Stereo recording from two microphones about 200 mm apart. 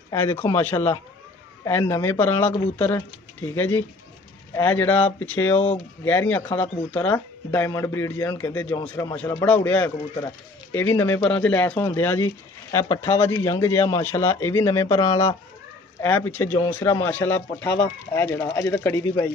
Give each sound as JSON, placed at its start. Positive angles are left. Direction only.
{"t": 0.1, "sound": "speech", "side_deg": 10}